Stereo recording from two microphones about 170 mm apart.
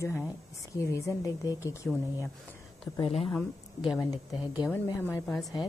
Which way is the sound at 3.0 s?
35° left (ahead or behind).